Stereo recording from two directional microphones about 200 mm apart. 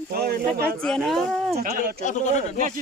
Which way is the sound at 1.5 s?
45° right (ahead or behind).